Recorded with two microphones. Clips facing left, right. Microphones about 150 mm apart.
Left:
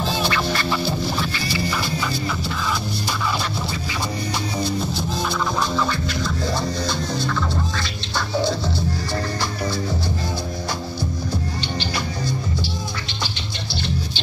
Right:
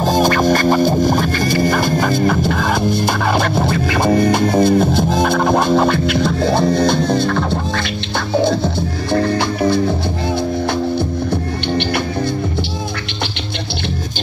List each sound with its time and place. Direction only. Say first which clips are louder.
0.0 s music: right 9 dB; 45° right (ahead or behind)